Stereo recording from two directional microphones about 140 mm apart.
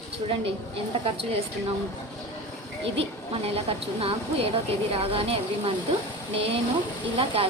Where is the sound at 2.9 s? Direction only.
45° right (ahead or behind).